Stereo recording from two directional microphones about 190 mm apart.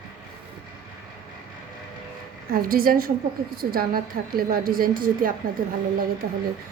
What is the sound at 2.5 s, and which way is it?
A woman's voice, 50° right (ahead or behind).